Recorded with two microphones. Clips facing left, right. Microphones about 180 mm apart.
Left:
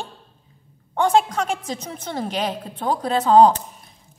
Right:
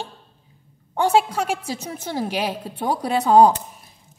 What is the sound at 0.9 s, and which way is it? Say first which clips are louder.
A woman's voice: even; 10° right (ahead or behind).